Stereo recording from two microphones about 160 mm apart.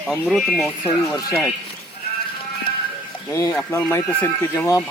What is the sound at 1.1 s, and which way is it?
Speech, 15° left (ahead or behind).